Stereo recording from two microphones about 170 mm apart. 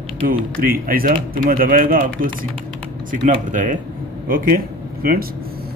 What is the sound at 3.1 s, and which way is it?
A man's voice, 50° right (ahead or behind).